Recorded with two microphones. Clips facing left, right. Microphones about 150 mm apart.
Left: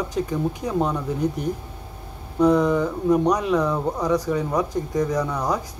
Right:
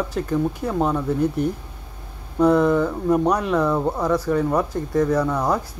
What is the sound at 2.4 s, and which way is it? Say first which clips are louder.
Speech: right 1 dB; 5° right (ahead or behind).